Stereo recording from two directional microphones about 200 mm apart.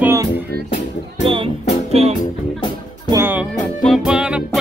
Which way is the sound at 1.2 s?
25° right (ahead or behind).